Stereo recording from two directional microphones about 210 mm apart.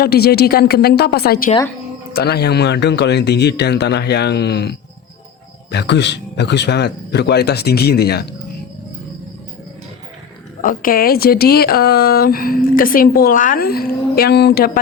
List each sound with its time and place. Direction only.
0.0 s speech: 50° left (ahead or behind)
5.7 s speech: 55° left (ahead or behind)
10.6 s speech: 40° left (ahead or behind)